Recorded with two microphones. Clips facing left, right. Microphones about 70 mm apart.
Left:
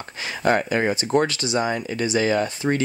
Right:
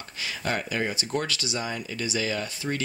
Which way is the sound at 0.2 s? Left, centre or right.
Left.